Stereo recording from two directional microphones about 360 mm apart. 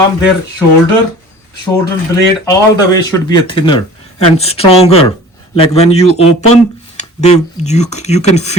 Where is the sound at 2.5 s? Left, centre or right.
Centre.